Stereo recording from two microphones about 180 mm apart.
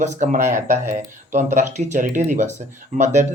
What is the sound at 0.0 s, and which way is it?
Speech, 40° right (ahead or behind).